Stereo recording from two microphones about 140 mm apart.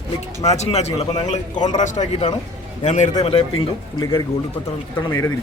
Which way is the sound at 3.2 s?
45° left (ahead or behind).